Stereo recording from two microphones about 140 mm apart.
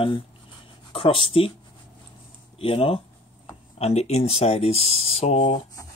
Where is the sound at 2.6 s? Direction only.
40° left (ahead or behind).